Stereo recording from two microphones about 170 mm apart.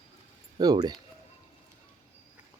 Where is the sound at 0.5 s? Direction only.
25° right (ahead or behind).